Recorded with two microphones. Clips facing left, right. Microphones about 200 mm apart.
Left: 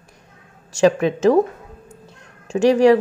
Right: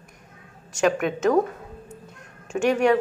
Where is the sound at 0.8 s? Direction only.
30° left (ahead or behind).